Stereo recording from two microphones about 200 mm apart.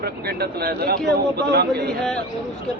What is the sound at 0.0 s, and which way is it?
A man's voice, 50° right (ahead or behind).